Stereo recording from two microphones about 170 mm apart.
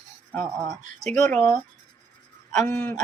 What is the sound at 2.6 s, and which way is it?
Speech, 10° left (ahead or behind).